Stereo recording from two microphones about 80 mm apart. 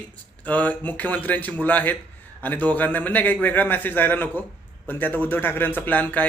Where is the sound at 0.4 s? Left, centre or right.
Centre.